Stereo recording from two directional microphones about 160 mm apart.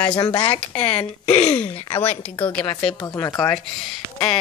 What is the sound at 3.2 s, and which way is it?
Speech, 10° left (ahead or behind).